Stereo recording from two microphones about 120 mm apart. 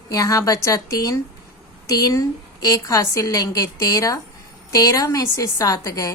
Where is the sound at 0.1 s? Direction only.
25° left (ahead or behind).